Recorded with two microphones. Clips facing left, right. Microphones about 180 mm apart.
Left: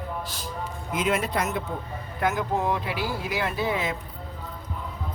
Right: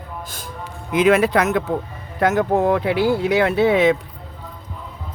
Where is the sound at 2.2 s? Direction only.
75° right (ahead or behind).